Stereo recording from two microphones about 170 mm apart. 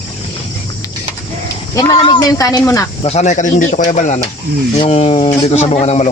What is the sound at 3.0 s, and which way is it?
Speech, 40° left (ahead or behind).